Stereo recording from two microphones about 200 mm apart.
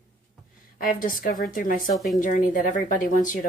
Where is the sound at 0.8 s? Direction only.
45° left (ahead or behind).